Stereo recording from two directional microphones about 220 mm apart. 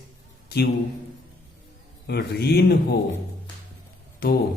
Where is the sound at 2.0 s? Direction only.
45° left (ahead or behind).